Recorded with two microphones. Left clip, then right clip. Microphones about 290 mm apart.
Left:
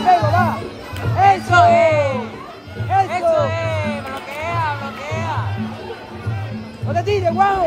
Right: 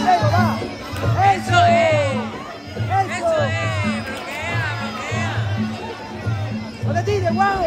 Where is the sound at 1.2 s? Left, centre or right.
Left.